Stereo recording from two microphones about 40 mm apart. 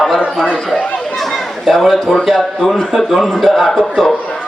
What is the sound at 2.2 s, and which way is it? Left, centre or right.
A man's voice, centre.